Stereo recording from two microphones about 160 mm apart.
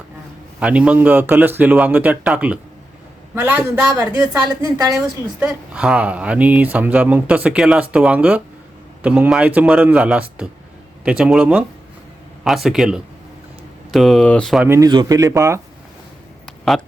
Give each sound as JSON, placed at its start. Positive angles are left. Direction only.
{"t": 0.6, "sound": "speech", "side_deg": -10}
{"t": 5.7, "sound": "speech", "side_deg": -5}
{"t": 14.6, "sound": "speech", "side_deg": -15}
{"t": 16.7, "sound": "speech", "side_deg": 0}